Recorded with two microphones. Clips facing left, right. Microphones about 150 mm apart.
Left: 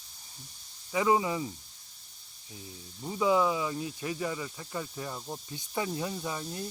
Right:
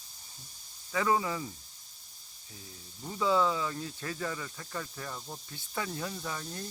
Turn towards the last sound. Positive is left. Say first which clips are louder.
# left 3 dB
turn(degrees=15)  # may be behind; listen again after turning